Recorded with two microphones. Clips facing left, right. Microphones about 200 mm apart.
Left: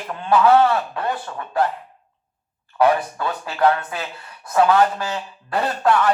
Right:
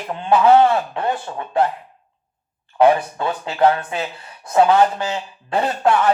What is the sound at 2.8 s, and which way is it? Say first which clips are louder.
A man's voice: right 3 dB; 25° right (ahead or behind).